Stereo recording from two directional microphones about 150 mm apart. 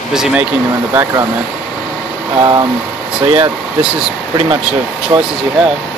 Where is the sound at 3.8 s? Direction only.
5° right (ahead or behind).